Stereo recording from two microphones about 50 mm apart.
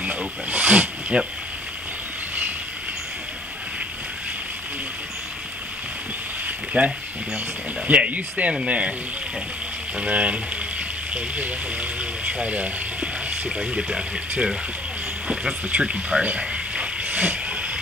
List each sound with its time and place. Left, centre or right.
0.0 s speech: right
1.1 s speech: centre
6.8 s speech: right
9.9 s speech: right
13.7 s speech: centre
15.2 s speech: right
17.0 s hiss: right